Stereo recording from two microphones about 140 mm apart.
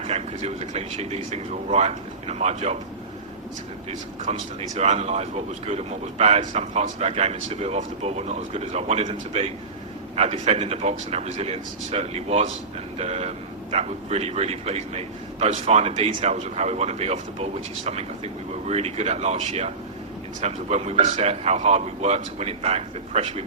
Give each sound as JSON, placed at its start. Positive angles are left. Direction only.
{"t": 0.0, "sound": "speech", "side_deg": -50}
{"t": 4.3, "sound": "speech", "side_deg": -55}